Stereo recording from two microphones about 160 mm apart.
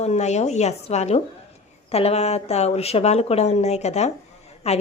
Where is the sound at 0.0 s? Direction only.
45° left (ahead or behind).